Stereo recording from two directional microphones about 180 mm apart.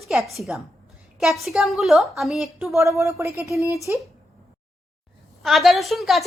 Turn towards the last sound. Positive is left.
turn(degrees=0)  # may be behind; listen again after turning